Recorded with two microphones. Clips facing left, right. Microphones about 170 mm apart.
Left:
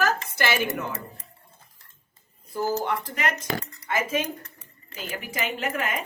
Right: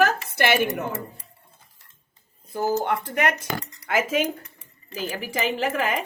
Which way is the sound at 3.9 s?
90° right.